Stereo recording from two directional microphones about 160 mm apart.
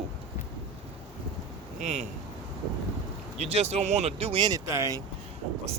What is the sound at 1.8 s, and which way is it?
Speech, 45° right (ahead or behind).